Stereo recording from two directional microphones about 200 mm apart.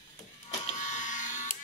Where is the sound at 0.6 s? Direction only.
35° left (ahead or behind).